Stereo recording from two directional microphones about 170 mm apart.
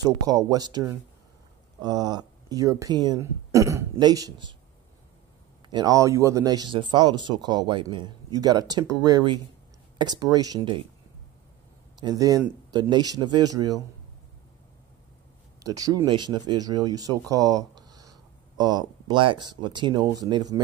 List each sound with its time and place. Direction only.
0.0 s speech: 20° right (ahead or behind)
5.7 s speech: 25° right (ahead or behind)
12.0 s speech: 20° right (ahead or behind)
15.6 s speech: 20° right (ahead or behind)